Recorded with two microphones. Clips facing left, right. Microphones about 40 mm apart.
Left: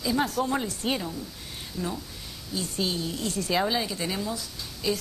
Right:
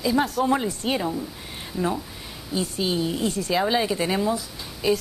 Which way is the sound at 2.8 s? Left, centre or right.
Right.